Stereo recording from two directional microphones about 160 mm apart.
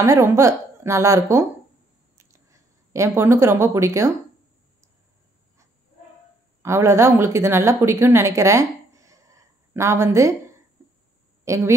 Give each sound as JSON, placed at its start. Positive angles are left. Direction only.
{"t": 0.0, "sound": "a woman's voice", "side_deg": -20}
{"t": 2.1, "sound": "a sound", "side_deg": -20}
{"t": 6.6, "sound": "speech", "side_deg": -15}
{"t": 11.4, "sound": "a woman's voice", "side_deg": -20}